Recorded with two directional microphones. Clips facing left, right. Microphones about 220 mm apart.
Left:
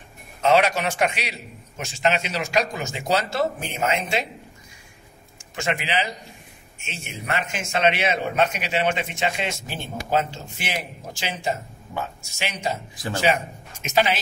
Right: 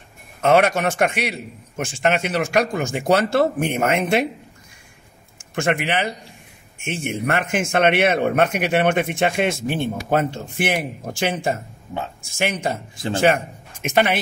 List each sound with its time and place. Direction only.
0.4 s a man's voice: 50° right (ahead or behind)
5.5 s a man's voice: 55° right (ahead or behind)
13.8 s a man's voice: 55° right (ahead or behind)